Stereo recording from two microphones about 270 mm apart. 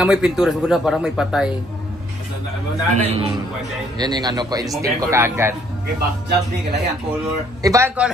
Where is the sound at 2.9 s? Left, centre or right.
Right.